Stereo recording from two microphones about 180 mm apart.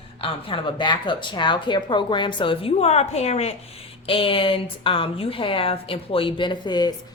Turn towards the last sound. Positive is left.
turn(degrees=25)  # may be behind; listen again after turning